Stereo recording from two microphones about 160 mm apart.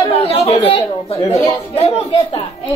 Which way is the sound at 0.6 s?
35° left (ahead or behind).